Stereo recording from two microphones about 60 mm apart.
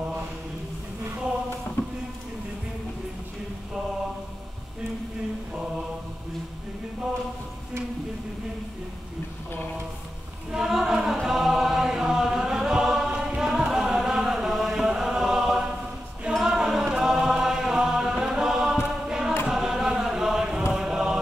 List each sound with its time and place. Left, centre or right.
5.5 s mantra: centre
10.5 s a sound: centre
11.2 s chant: centre
16.3 s music: centre
19.0 s choir: centre
19.4 s chant: centre